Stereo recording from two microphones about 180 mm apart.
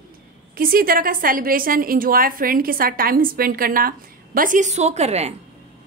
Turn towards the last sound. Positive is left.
turn(degrees=-35)  # may be behind; listen again after turning